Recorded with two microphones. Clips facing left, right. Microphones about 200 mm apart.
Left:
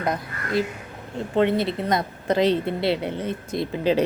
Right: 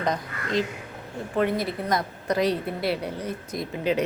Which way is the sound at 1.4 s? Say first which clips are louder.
Left 4 dB; 25° left (ahead or behind).